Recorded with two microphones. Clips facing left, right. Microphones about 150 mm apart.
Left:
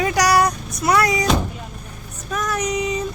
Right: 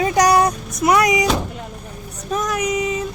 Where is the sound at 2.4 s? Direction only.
5° right (ahead or behind).